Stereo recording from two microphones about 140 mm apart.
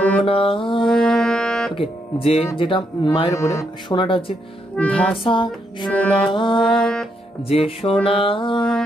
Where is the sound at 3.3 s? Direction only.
20° left (ahead or behind).